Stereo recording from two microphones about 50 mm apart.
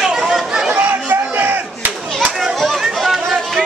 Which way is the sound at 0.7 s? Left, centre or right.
Right.